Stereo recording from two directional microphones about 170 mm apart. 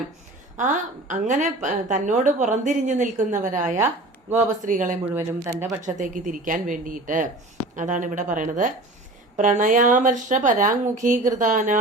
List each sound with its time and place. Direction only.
0.6 s a woman's voice: 45° right (ahead or behind)
5.0 s speech: 15° right (ahead or behind)
5.8 s a woman's voice: 50° right (ahead or behind)